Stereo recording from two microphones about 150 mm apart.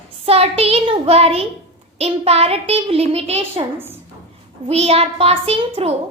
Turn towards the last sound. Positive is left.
turn(degrees=-40)  # may be behind; listen again after turning